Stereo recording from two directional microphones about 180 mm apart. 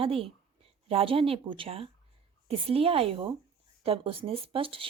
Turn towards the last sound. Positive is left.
turn(degrees=-30)  # may be behind; listen again after turning